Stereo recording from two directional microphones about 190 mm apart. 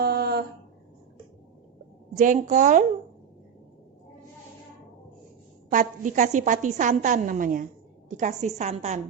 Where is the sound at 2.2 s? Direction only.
40° right (ahead or behind).